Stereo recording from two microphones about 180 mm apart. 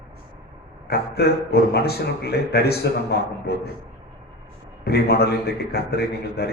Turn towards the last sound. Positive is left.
turn(degrees=60)  # may be behind; listen again after turning